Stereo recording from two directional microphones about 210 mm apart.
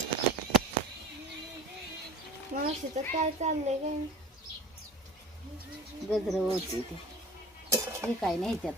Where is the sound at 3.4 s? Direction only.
35° right (ahead or behind).